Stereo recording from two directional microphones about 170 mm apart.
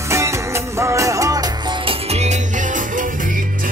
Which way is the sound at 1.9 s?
40° right (ahead or behind).